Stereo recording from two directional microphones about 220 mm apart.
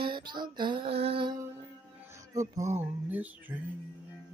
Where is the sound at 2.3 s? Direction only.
15° right (ahead or behind).